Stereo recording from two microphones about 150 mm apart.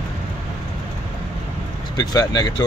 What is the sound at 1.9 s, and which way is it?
Speech, 25° left (ahead or behind).